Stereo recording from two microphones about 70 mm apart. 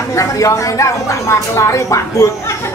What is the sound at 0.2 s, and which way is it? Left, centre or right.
Speech, left.